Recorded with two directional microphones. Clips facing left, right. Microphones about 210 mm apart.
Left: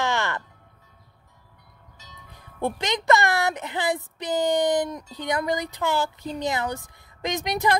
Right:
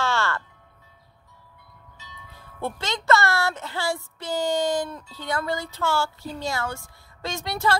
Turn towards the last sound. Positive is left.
turn(degrees=15)  # may be behind; listen again after turning